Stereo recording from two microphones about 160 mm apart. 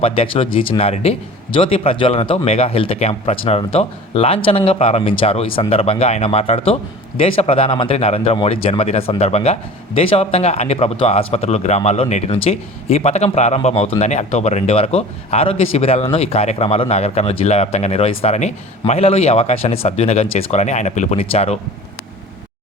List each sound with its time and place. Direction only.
0.0 s speech: 35° left (ahead or behind)